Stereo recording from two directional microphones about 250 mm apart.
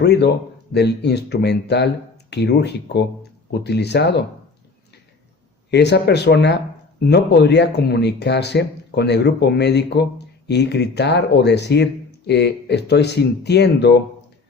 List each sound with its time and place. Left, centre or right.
0.0 s speech: left
5.7 s speech: left